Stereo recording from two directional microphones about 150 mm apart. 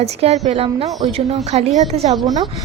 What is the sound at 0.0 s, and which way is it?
A woman's voice, 45° right (ahead or behind).